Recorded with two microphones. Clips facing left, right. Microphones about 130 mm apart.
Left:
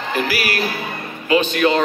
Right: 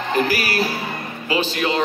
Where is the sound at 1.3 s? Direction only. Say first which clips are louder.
Left 6 dB; 25° right (ahead or behind).